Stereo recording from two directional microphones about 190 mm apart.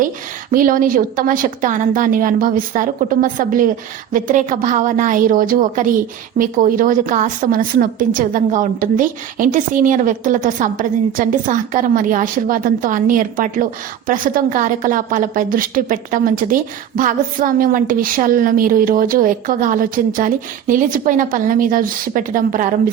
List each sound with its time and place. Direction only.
0.5 s a woman's voice: 45° right (ahead or behind)